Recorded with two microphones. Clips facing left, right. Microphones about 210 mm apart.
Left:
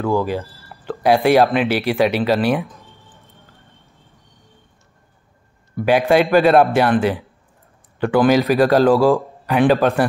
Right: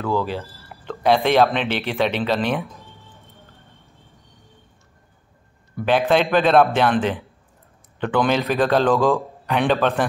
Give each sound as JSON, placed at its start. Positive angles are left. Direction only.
{"t": 0.0, "sound": "speech", "side_deg": 15}
{"t": 5.9, "sound": "speech", "side_deg": 10}